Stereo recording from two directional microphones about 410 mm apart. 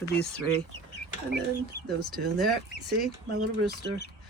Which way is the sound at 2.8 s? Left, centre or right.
Right.